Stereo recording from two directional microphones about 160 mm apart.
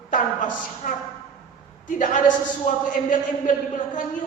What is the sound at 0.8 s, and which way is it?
A man's voice, 55° left (ahead or behind).